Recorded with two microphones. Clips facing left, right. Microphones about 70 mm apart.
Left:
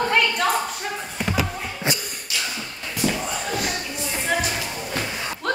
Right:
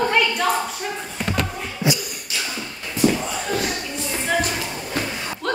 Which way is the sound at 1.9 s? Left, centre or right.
Left.